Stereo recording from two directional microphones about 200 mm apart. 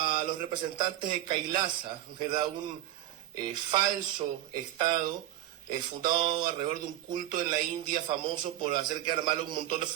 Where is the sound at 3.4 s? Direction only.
20° right (ahead or behind).